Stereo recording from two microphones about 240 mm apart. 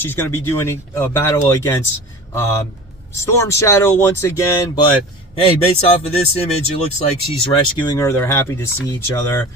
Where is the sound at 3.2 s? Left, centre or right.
Centre.